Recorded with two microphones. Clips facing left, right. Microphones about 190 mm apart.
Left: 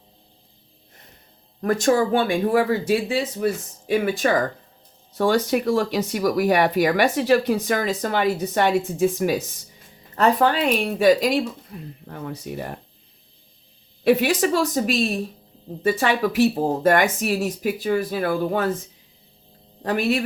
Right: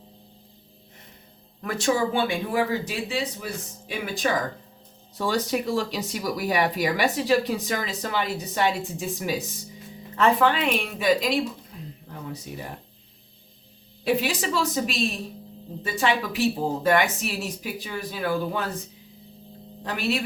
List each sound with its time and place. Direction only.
1.6 s speech: 45° left (ahead or behind)
5.1 s speech: 60° left (ahead or behind)
10.2 s speech: 40° left (ahead or behind)
12.0 s speech: 55° left (ahead or behind)
14.0 s speech: 55° left (ahead or behind)
19.8 s speech: 45° left (ahead or behind)